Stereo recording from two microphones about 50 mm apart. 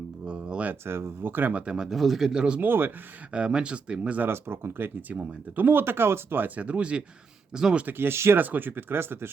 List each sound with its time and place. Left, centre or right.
0.3 s a sound: right
0.9 s speech: right
1.9 s speech: centre
2.3 s speech: centre
2.6 s speech: right
3.3 s speech: centre
4.3 s speech: right
5.0 s speech: right
6.4 s speech: right
7.5 s speech: centre
7.9 s speech: right
8.4 s speech: right